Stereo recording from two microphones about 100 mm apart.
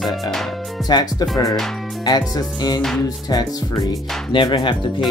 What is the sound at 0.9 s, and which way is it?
Speech, 45° left (ahead or behind).